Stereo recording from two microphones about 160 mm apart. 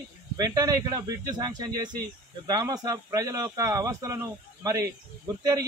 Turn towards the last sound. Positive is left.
turn(degrees=-20)  # may be behind; listen again after turning